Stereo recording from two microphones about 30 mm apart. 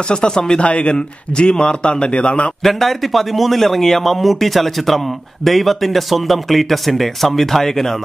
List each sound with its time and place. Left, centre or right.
0.1 s speech: left
0.6 s a man's voice: left
2.6 s a man's voice: centre